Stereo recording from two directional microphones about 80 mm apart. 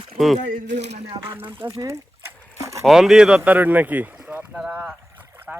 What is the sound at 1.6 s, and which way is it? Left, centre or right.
Speech, right.